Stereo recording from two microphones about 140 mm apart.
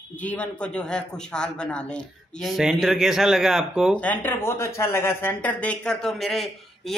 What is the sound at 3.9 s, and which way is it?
A man's voice, 10° left (ahead or behind).